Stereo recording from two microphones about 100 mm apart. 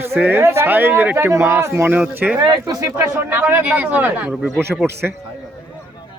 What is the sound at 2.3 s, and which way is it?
Speech, 50° right (ahead or behind).